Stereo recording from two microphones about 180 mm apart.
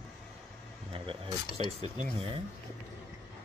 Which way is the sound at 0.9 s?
30° right (ahead or behind).